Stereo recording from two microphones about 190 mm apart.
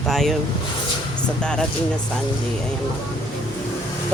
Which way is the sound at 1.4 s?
5° left (ahead or behind).